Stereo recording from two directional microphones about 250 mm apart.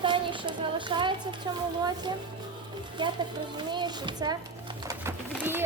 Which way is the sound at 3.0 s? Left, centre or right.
Centre.